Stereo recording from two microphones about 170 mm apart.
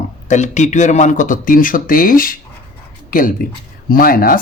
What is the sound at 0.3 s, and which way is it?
A man's voice, 45° left (ahead or behind).